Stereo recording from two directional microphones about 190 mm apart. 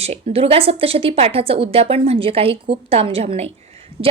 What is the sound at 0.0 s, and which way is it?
A woman's voice, 30° right (ahead or behind).